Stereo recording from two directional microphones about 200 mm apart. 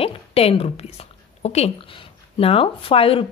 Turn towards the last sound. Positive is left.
turn(degrees=30)  # may be behind; listen again after turning